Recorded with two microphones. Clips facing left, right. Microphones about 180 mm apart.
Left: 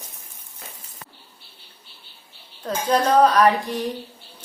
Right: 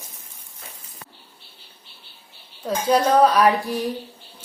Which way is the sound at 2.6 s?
10° right (ahead or behind).